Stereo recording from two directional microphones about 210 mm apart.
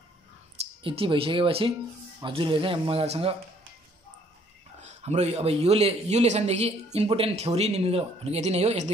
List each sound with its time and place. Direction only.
0.8 s a man's voice: 25° right (ahead or behind)
4.8 s a man's voice: 30° right (ahead or behind)